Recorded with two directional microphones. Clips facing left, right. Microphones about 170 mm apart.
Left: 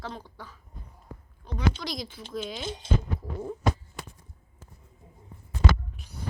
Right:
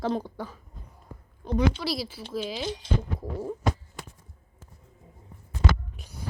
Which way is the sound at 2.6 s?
25° left (ahead or behind).